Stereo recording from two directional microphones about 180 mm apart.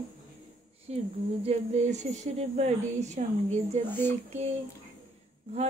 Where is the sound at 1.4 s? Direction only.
35° right (ahead or behind).